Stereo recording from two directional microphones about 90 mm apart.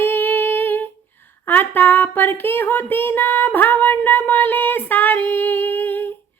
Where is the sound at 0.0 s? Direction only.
25° left (ahead or behind).